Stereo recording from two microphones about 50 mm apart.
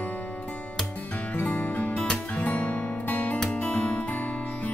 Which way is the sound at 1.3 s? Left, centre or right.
Left.